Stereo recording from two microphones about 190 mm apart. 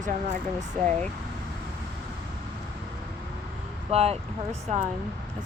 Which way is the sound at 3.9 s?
30° right (ahead or behind).